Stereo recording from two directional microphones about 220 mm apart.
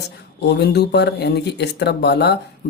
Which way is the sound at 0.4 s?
50° left (ahead or behind).